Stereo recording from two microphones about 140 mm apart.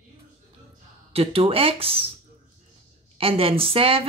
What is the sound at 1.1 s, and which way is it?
Speech, 40° right (ahead or behind).